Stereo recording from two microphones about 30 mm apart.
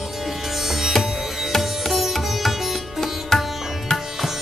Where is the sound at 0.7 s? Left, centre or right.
Centre.